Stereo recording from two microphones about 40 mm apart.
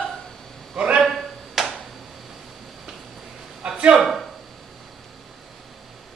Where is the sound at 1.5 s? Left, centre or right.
Centre.